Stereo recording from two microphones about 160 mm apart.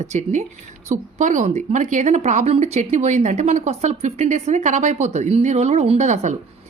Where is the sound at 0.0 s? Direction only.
45° right (ahead or behind).